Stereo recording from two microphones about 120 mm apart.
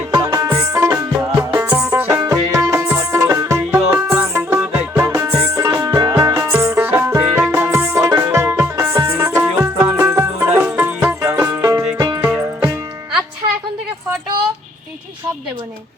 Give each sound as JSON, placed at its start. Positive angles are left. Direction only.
{"t": 0.1, "sound": "music", "side_deg": -30}